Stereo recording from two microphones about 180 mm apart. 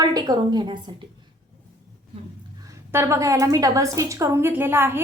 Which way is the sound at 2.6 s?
15° right (ahead or behind).